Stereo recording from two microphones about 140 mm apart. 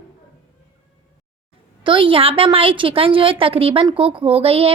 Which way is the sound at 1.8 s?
35° right (ahead or behind).